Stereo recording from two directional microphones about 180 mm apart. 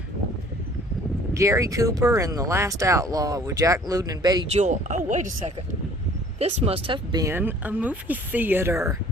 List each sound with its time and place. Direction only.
1.3 s speech: 15° right (ahead or behind)
4.5 s a woman's voice: 40° right (ahead or behind)
6.4 s speech: 35° right (ahead or behind); by 9.0 s 15° right (ahead or behind)